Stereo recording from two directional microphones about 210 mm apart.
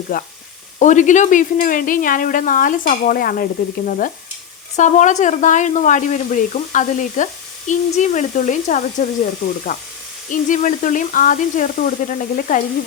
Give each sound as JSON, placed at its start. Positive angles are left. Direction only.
{"t": 0.1, "sound": "speech", "side_deg": 40}
{"t": 10.3, "sound": "speech", "side_deg": 35}